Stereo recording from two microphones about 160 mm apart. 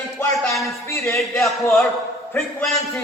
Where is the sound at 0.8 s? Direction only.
15° left (ahead or behind).